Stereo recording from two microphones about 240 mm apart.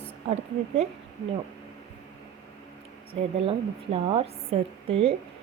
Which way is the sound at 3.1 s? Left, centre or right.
Right.